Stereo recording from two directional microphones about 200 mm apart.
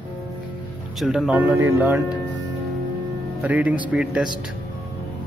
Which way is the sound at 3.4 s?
5° right (ahead or behind).